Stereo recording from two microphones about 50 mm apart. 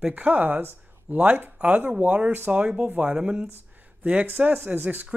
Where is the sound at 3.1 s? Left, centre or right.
Right.